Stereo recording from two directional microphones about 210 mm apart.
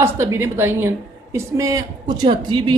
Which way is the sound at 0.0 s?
10° right (ahead or behind).